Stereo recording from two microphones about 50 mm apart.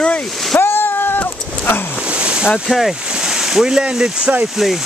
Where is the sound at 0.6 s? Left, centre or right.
Left.